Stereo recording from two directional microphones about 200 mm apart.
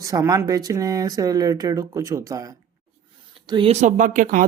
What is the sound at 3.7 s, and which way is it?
Speech, 40° right (ahead or behind).